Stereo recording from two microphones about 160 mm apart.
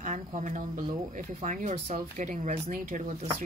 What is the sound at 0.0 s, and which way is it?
Speech, 50° right (ahead or behind).